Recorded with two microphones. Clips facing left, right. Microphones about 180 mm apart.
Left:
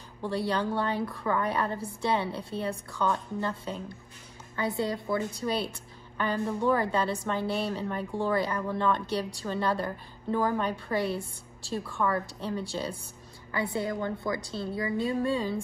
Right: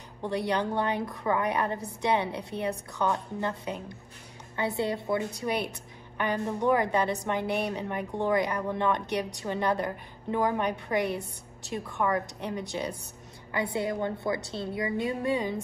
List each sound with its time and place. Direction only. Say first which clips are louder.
0.2 s a woman's voice: right 1 dB; 20° right (ahead or behind)